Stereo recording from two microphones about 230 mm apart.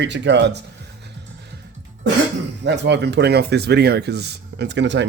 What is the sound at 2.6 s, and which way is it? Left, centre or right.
Speech, right.